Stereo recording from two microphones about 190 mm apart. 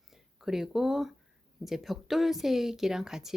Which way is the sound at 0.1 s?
Centre (ahead or behind).